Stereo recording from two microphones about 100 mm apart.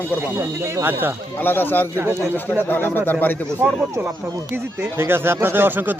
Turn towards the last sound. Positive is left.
turn(degrees=-20)  # may be behind; listen again after turning